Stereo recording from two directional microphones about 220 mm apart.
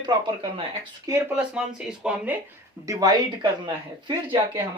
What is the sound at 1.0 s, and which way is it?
Speech, 10° right (ahead or behind).